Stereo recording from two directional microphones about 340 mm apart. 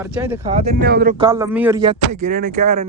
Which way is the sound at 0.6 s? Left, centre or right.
Right.